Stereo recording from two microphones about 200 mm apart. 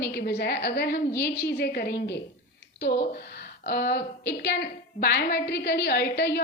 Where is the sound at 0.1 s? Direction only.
55° left (ahead or behind).